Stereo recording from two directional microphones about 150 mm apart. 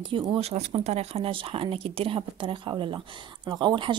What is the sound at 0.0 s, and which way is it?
Speech, 35° right (ahead or behind).